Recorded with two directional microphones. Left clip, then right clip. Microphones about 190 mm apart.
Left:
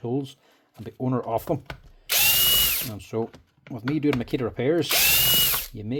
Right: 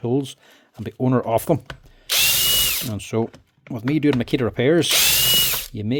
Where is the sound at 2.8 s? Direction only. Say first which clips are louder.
Right 5 dB; 50° right (ahead or behind).